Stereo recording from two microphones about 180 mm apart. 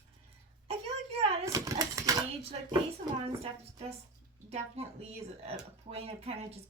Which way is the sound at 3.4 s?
35° right (ahead or behind).